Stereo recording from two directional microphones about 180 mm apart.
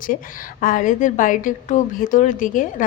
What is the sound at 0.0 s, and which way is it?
A woman's voice, 50° left (ahead or behind).